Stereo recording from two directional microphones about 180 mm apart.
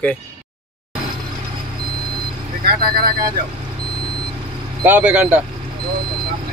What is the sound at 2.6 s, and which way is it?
Vehicle, 60° right (ahead or behind).